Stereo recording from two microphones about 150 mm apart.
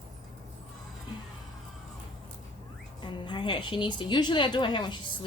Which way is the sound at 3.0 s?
30° left (ahead or behind).